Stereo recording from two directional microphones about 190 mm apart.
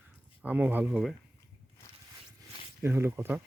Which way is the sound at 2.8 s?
10° right (ahead or behind).